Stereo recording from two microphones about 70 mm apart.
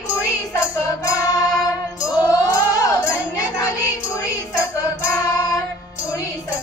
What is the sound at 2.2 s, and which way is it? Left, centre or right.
Music, left.